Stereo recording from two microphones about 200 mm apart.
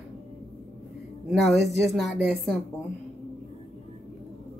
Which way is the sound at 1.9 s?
Centre (ahead or behind).